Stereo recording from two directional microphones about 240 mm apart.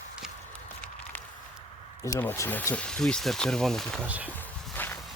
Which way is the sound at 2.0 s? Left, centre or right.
Centre.